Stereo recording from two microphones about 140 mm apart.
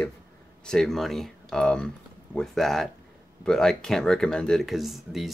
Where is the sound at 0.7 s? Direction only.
5° left (ahead or behind).